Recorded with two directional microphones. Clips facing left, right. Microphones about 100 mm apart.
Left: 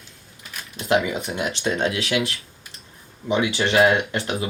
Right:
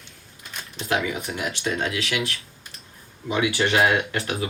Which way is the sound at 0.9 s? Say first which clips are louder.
Left 4 dB; 25° left (ahead or behind).